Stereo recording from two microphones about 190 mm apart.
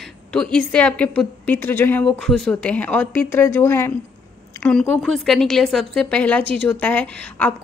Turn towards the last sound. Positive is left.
turn(degrees=5)  # may be behind; listen again after turning